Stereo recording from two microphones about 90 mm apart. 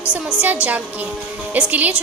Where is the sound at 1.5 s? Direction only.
15° right (ahead or behind).